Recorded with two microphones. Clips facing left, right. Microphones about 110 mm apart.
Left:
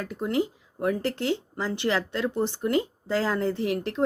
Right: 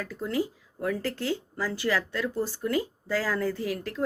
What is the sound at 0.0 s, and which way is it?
Speech, 20° left (ahead or behind).